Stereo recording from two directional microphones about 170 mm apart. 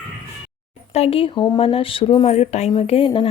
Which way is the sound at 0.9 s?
35° left (ahead or behind).